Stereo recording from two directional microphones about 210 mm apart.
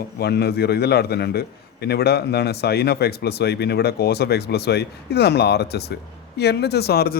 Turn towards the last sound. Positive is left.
turn(degrees=50)  # may be behind; listen again after turning